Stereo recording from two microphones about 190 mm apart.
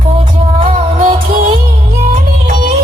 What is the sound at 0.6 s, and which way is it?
Music, 45° right (ahead or behind).